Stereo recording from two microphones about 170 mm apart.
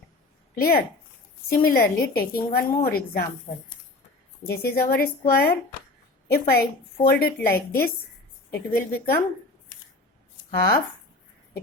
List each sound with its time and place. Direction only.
0.5 s a woman's voice: 60° left (ahead or behind)
4.4 s a woman's voice: 65° left (ahead or behind)
10.5 s a woman's voice: 60° left (ahead or behind)